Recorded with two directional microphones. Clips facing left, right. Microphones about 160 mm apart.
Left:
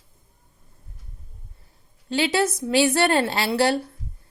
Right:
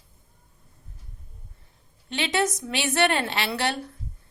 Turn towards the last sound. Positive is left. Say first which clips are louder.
# left 6 dB
turn(degrees=35)  # may be behind; listen again after turning